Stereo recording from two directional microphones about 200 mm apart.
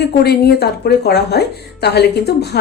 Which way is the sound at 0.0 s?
55° left (ahead or behind).